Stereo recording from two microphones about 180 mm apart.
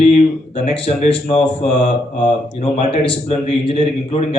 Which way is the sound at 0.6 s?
35° left (ahead or behind).